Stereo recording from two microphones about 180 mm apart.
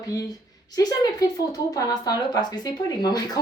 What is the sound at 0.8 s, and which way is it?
A woman's voice, 20° left (ahead or behind).